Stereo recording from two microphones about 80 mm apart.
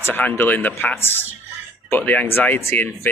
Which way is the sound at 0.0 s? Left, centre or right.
Left.